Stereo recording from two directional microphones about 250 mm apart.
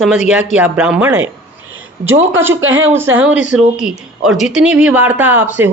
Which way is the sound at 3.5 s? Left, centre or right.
Centre.